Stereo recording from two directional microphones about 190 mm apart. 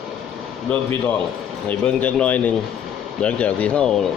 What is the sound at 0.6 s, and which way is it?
Speech, 10° left (ahead or behind).